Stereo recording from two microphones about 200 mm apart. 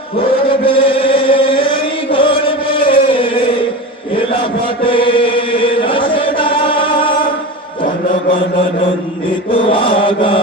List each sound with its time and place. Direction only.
0.3 s chant: 25° left (ahead or behind)
4.1 s a sound: 25° left (ahead or behind)
4.8 s chant: 25° left (ahead or behind)
9.5 s mantra: 25° left (ahead or behind)